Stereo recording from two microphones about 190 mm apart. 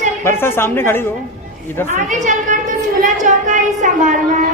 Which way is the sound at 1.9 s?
40° right (ahead or behind).